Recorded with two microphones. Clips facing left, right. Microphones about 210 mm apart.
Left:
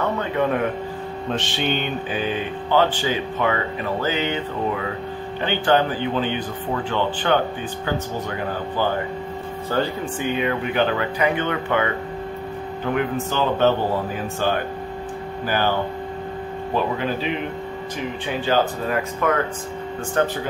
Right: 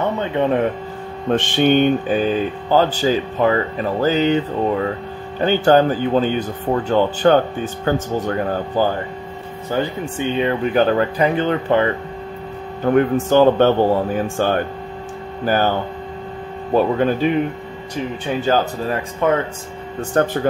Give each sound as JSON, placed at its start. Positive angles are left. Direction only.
{"t": 0.2, "sound": "speech", "side_deg": -25}
{"t": 1.3, "sound": "speech", "side_deg": -50}
{"t": 9.7, "sound": "speech", "side_deg": -20}
{"t": 12.8, "sound": "speech", "side_deg": -45}
{"t": 16.7, "sound": "speech", "side_deg": -45}
{"t": 18.4, "sound": "speech", "side_deg": -40}
{"t": 19.2, "sound": "speech", "side_deg": -25}
{"t": 20.2, "sound": "speech", "side_deg": -45}